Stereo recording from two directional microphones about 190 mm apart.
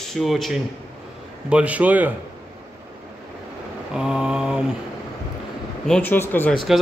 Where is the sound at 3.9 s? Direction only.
5° right (ahead or behind).